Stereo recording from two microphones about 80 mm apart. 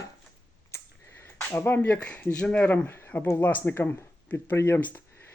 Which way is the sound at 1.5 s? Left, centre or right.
Left.